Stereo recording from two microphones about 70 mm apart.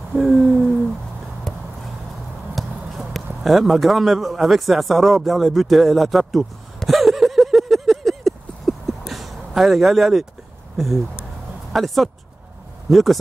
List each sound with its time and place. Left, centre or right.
0.1 s hoot: centre
1.5 s a sound: centre
9.1 s vehicle: centre
11.7 s speech: centre